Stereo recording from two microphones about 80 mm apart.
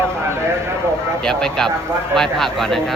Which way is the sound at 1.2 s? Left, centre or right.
Centre.